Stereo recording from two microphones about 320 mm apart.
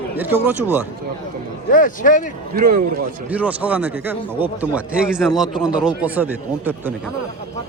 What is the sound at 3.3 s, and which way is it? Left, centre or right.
A man's voice, centre.